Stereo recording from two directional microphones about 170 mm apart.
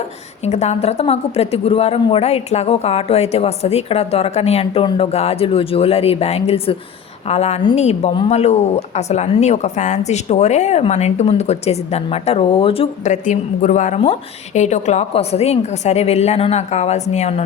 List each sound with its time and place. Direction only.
0.4 s a woman's voice: 40° left (ahead or behind)